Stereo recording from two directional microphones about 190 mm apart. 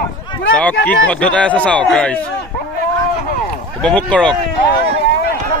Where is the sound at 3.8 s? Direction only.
5° left (ahead or behind).